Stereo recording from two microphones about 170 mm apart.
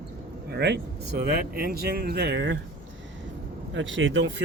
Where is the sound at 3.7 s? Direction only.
90° right.